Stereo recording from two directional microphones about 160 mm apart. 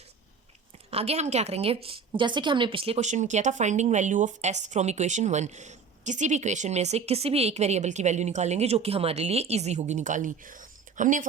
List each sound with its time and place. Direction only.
0.9 s a woman's voice: 40° right (ahead or behind)